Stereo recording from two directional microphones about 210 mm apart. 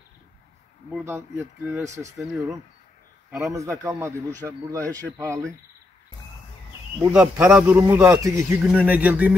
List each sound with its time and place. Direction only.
1.0 s speech: 10° right (ahead or behind)
3.3 s speech: 10° right (ahead or behind)
7.1 s speech: 5° right (ahead or behind)